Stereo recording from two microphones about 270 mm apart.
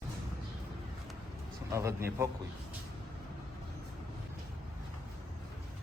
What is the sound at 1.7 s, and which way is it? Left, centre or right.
Speech, centre.